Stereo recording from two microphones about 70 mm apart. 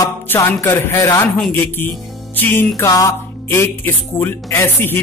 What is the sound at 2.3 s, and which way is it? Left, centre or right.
Music, left.